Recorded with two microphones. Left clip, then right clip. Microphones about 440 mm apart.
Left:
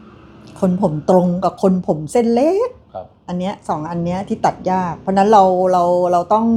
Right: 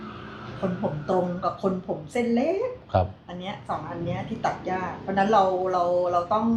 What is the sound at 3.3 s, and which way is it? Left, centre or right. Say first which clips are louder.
A woman's voice: left 10 dB; left.